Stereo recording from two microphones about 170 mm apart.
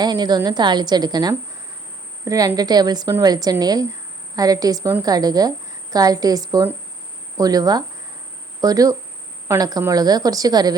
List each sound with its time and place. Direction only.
0.0 s a woman's voice: 25° right (ahead or behind)